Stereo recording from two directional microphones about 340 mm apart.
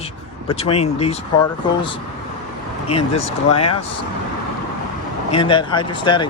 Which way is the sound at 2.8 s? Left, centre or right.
Centre.